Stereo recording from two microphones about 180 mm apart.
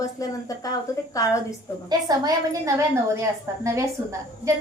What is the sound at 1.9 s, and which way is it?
A woman's voice, 20° right (ahead or behind).